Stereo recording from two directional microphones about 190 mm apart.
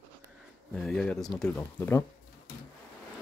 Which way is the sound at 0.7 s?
5° left (ahead or behind).